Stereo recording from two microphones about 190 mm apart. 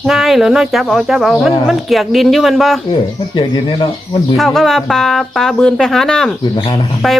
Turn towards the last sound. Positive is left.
turn(degrees=0)  # may be behind; listen again after turning